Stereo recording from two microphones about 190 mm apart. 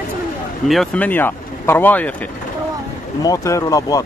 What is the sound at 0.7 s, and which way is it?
A man's voice, 5° left (ahead or behind).